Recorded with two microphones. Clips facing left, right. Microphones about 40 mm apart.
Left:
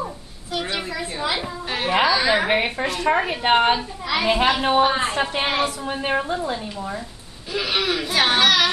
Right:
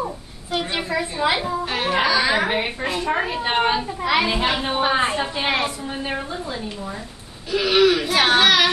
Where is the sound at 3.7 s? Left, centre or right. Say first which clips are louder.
Right 4 dB; centre.